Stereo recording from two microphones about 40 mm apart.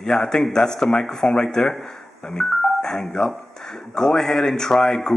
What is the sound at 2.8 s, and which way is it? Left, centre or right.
Speech, centre.